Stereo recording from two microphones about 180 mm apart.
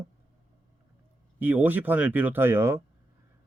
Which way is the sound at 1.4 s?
10° right (ahead or behind).